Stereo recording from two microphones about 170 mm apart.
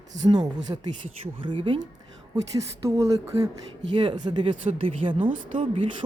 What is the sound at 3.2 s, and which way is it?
Speech, 20° right (ahead or behind).